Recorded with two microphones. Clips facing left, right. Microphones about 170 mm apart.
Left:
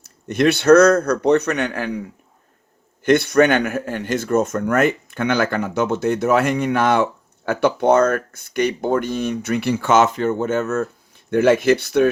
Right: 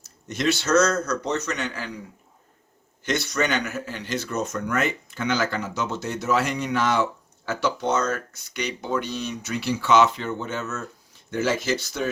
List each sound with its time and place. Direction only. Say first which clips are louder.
0.0 s a man's voice: left 8 dB; 60° left (ahead or behind)
3.0 s a man's voice: left 11 dB; 55° left (ahead or behind)